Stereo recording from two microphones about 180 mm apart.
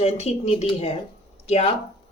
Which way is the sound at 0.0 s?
35° left (ahead or behind).